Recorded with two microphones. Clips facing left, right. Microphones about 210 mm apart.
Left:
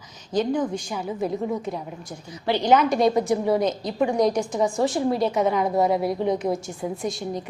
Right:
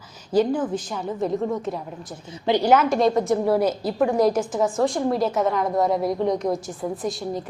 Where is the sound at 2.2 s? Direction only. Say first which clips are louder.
Right 2 dB; 25° right (ahead or behind).